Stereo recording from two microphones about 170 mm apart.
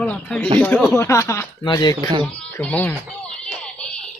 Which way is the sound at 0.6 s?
5° left (ahead or behind).